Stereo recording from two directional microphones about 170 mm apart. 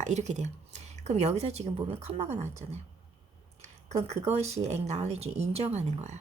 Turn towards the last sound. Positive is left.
turn(degrees=-40)  # may be behind; listen again after turning